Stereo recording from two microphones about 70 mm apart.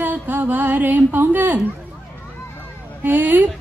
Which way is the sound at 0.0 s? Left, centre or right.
Right.